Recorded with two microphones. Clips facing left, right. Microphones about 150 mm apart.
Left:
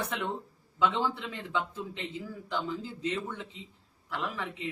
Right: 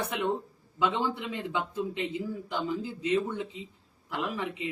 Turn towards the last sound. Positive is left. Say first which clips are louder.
# right 3 dB
turn(degrees=-15)  # may be behind; listen again after turning